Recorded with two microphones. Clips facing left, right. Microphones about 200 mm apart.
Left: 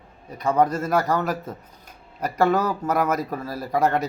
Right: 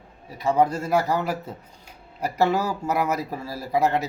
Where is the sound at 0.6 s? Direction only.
15° right (ahead or behind).